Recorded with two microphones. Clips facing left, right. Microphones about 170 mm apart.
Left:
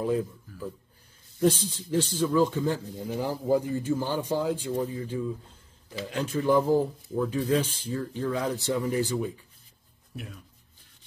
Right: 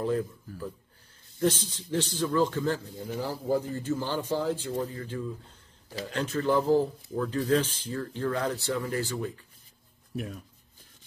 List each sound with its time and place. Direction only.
0.0 s a man's voice: 10° left (ahead or behind)
10.1 s speech: 45° right (ahead or behind)